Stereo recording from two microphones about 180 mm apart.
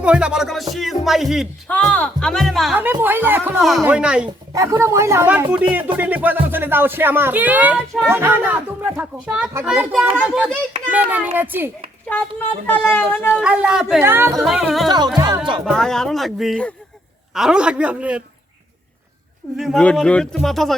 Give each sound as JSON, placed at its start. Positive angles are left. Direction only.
{"t": 0.0, "sound": "speech", "side_deg": -5}
{"t": 2.7, "sound": "speech", "side_deg": -10}
{"t": 3.6, "sound": "speech", "side_deg": 0}
{"t": 4.5, "sound": "speech", "side_deg": -15}
{"t": 12.6, "sound": "speech", "side_deg": 10}
{"t": 13.4, "sound": "speech", "side_deg": -5}
{"t": 14.8, "sound": "music", "side_deg": -25}
{"t": 15.6, "sound": "speech", "side_deg": 0}
{"t": 19.5, "sound": "speech", "side_deg": 0}